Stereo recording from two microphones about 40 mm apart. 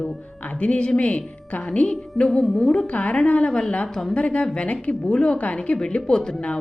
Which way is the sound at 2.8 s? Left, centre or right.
Left.